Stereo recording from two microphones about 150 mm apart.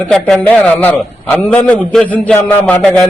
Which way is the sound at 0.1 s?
5° left (ahead or behind).